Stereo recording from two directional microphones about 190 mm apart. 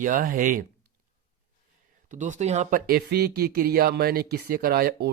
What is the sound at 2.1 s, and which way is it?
Speech, 40° right (ahead or behind).